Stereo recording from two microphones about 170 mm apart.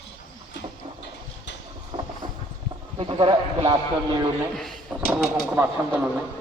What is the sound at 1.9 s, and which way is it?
Vehicle, 30° right (ahead or behind).